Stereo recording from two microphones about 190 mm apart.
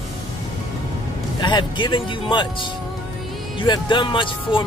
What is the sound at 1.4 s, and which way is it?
Speech, 25° left (ahead or behind).